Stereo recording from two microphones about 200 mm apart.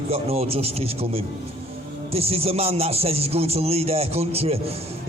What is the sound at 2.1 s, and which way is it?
A man's voice, 30° right (ahead or behind).